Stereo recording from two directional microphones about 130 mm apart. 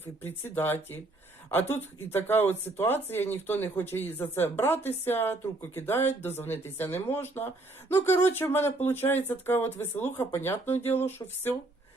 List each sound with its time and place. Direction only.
0.0 s speech: 15° left (ahead or behind)